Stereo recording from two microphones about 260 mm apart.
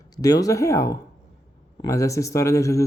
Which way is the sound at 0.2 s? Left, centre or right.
Centre.